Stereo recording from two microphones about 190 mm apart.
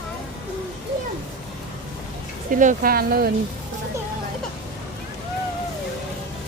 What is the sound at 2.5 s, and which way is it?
Speech, 45° right (ahead or behind).